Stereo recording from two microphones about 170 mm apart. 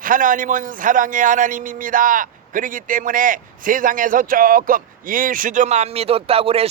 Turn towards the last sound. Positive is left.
turn(degrees=-35)  # may be behind; listen again after turning